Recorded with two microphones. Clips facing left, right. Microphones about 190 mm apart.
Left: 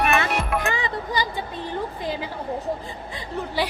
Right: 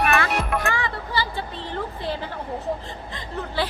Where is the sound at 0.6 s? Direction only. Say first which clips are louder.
Left 1 dB; 20° left (ahead or behind).